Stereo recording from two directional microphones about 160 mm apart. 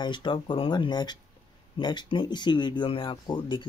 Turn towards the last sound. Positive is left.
turn(degrees=30)  # may be behind; listen again after turning